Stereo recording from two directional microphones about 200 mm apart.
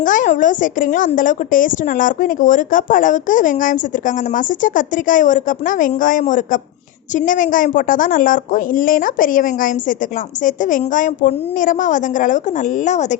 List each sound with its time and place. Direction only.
0.0 s a woman's voice: 40° left (ahead or behind)